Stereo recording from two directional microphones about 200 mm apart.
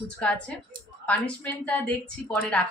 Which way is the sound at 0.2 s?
5° left (ahead or behind).